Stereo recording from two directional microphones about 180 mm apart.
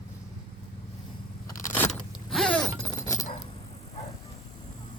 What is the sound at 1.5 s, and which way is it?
Vehicle, 15° left (ahead or behind).